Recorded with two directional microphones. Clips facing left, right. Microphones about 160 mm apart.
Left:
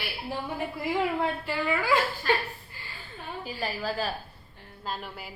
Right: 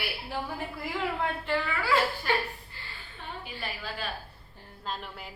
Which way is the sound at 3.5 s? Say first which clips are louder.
Left 8 dB; 40° left (ahead or behind).